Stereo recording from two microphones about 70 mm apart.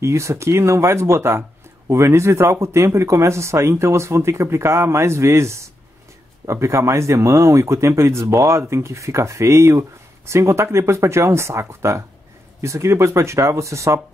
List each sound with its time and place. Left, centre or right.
0.0 s speech: right